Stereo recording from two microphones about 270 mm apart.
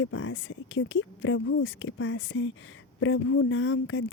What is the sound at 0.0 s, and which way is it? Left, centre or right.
A woman's voice, left.